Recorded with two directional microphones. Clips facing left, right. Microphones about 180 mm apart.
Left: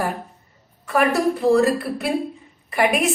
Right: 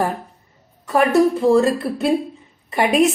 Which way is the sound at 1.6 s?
25° right (ahead or behind).